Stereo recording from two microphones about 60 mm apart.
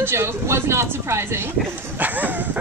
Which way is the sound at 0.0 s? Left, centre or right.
Right.